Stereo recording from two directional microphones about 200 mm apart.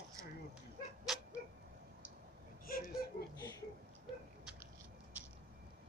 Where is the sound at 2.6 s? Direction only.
45° left (ahead or behind).